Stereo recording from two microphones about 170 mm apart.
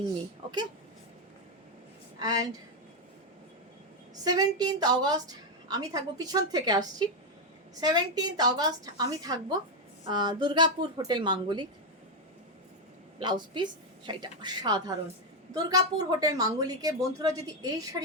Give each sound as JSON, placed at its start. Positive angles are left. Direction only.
{"t": 2.1, "sound": "a woman's voice", "side_deg": -20}
{"t": 4.2, "sound": "a woman's voice", "side_deg": -25}
{"t": 13.1, "sound": "a woman's voice", "side_deg": -30}